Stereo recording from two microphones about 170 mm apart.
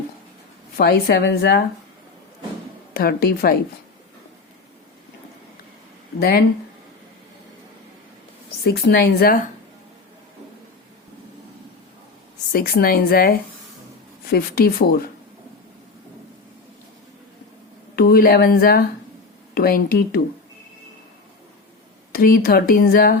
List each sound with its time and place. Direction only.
0.8 s speech: 65° left (ahead or behind)
2.9 s speech: 60° left (ahead or behind)
6.1 s speech: 65° left (ahead or behind)
8.6 s speech: 65° left (ahead or behind)
12.5 s speech: 60° left (ahead or behind)
17.9 s speech: 60° left (ahead or behind)
22.1 s speech: 60° left (ahead or behind)